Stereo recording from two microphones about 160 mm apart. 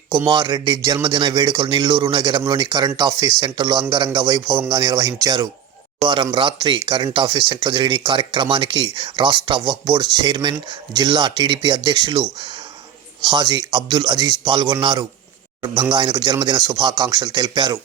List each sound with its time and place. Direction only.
0.3 s a man's voice: 30° right (ahead or behind)
13.2 s a man's voice: 30° right (ahead or behind)